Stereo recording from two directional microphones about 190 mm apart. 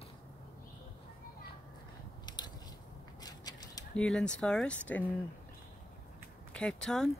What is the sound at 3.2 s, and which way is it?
Mechanisms, 20° left (ahead or behind).